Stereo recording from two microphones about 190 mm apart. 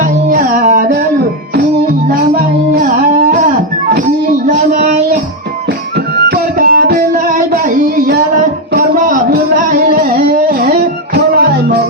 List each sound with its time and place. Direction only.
0.3 s music: 45° right (ahead or behind)
3.5 s music: 50° right (ahead or behind)
6.2 s music: 55° right (ahead or behind)